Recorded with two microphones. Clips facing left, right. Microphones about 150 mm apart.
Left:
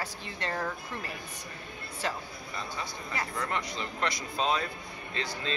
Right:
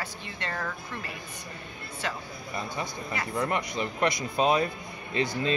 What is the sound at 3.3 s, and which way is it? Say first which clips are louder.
Speech: right 8 dB; 15° right (ahead or behind).